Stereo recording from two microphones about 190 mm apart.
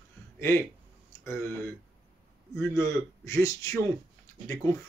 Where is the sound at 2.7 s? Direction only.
15° left (ahead or behind).